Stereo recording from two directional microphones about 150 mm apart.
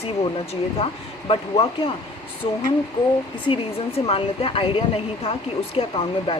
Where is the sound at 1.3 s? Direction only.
40° left (ahead or behind).